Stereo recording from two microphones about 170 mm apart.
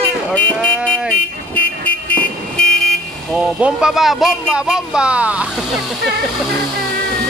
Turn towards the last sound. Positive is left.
turn(degrees=-5)  # may be behind; listen again after turning